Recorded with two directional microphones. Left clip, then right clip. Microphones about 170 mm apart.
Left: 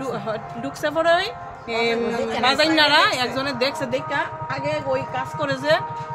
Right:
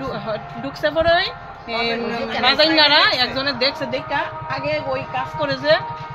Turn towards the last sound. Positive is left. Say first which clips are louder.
# right 3 dB
turn(degrees=15)  # may be behind; listen again after turning